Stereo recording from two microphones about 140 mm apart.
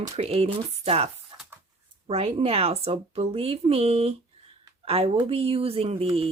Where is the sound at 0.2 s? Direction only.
45° right (ahead or behind).